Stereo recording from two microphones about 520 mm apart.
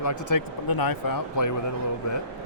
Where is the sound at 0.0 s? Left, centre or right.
Left.